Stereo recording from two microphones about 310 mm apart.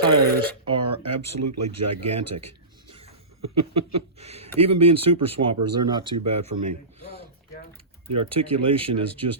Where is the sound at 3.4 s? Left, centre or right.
Centre.